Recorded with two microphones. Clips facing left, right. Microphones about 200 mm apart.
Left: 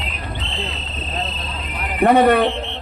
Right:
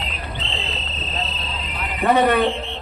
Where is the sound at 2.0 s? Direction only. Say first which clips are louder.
Left 4 dB; 55° left (ahead or behind).